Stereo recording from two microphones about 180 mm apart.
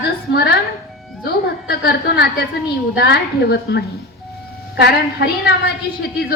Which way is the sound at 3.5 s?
70° left (ahead or behind).